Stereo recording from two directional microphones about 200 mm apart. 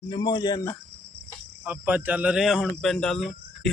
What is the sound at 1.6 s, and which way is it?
Speech, 10° right (ahead or behind).